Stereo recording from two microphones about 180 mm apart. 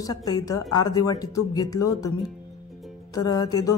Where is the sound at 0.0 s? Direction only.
20° left (ahead or behind).